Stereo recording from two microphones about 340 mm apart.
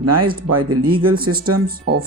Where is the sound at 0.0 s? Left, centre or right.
Right.